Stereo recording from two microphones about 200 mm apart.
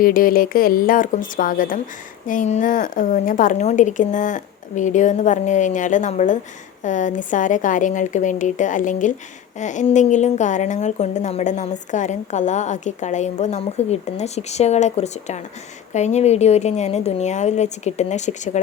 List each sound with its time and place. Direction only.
0.0 s a woman's voice: 45° left (ahead or behind)